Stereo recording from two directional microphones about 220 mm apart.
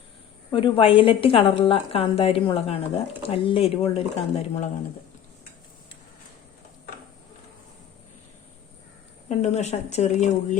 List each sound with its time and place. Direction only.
0.5 s a woman's voice: 25° left (ahead or behind)
9.4 s speech: 30° left (ahead or behind)